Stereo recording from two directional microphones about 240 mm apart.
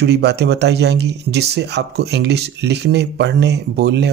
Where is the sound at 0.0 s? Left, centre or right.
Right.